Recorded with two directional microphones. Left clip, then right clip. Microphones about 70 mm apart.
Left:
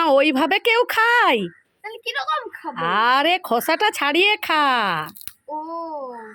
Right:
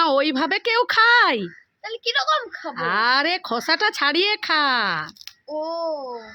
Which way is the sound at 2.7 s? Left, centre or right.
Left.